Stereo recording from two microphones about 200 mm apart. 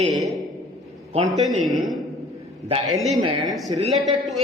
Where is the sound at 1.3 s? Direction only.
Centre (ahead or behind).